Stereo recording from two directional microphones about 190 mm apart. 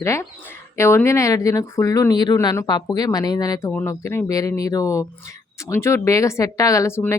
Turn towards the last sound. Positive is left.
turn(degrees=15)  # may be behind; listen again after turning